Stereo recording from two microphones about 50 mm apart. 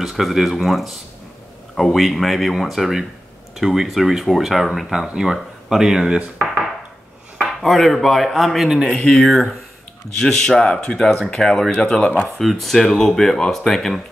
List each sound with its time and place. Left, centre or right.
0.0 s speech: centre
7.4 s speech: centre
8.8 s speech: centre
9.1 s speech: centre
12.4 s speech: centre